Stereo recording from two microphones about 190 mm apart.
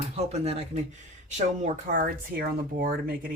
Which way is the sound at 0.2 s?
35° right (ahead or behind).